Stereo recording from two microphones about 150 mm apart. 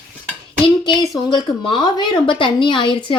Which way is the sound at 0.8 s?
25° left (ahead or behind).